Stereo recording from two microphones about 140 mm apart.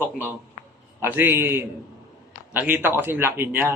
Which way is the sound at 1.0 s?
15° right (ahead or behind).